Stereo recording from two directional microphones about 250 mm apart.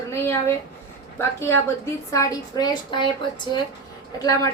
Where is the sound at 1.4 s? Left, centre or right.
Centre.